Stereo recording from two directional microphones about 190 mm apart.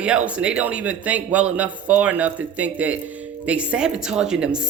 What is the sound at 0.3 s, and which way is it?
Speech, 5° right (ahead or behind).